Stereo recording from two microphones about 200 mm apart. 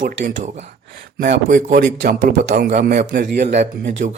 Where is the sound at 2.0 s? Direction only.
50° right (ahead or behind).